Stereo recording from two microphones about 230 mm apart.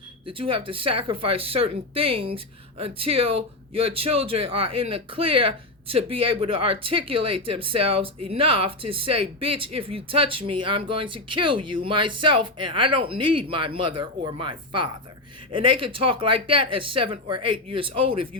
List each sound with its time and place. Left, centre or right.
0.3 s speech: right